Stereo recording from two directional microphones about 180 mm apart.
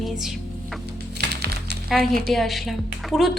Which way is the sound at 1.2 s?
65° right (ahead or behind).